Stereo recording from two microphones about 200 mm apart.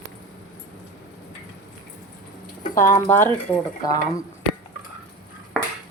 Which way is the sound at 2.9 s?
10° left (ahead or behind).